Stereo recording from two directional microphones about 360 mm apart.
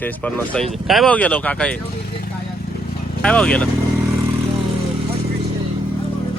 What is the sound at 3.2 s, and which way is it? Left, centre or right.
Speech, centre.